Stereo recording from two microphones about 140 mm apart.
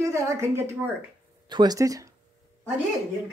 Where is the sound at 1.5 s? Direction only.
30° right (ahead or behind).